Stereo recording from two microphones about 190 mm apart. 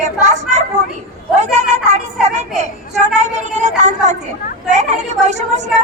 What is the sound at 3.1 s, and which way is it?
A woman's voice, 40° right (ahead or behind).